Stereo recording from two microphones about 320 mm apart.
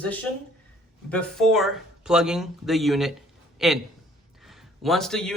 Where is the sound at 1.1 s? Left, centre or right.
Centre.